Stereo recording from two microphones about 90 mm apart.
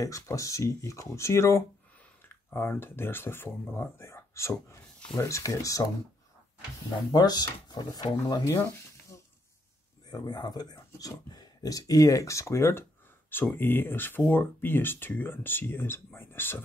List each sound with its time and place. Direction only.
0.0 s speech: 35° left (ahead or behind)
7.1 s speech: 50° left (ahead or behind)
9.1 s a sound: 40° left (ahead or behind)
10.0 s speech: 50° left (ahead or behind); by 16.6 s 25° left (ahead or behind)